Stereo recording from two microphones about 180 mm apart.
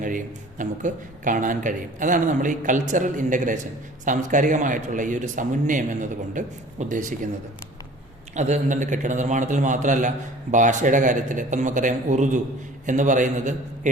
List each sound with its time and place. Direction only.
0.6 s speech: 45° right (ahead or behind)
8.4 s speech: 40° right (ahead or behind)